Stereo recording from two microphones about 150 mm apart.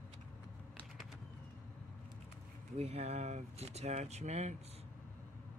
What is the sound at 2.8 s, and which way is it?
Speech, 45° right (ahead or behind).